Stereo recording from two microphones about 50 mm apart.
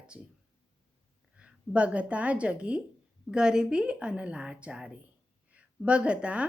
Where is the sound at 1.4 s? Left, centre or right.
Right.